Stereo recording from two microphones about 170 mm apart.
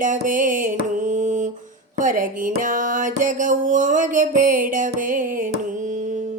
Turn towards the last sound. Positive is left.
turn(degrees=-50)  # may be behind; listen again after turning